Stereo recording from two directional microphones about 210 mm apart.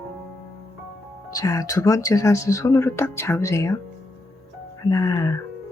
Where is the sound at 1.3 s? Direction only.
15° left (ahead or behind).